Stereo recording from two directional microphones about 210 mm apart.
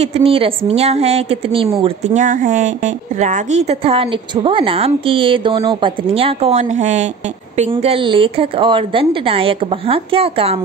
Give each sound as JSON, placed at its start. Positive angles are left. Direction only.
{"t": 0.0, "sound": "a woman's voice", "side_deg": -30}
{"t": 2.2, "sound": "a woman's voice", "side_deg": -40}